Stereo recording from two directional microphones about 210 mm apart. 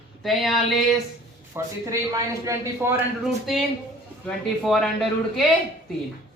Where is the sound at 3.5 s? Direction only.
Centre (ahead or behind).